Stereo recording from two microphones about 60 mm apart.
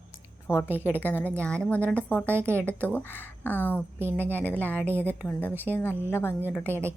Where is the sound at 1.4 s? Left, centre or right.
Centre.